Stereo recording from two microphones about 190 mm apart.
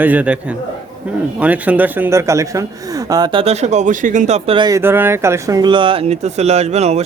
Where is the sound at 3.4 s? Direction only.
35° right (ahead or behind).